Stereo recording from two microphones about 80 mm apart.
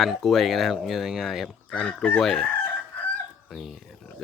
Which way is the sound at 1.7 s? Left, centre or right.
Centre.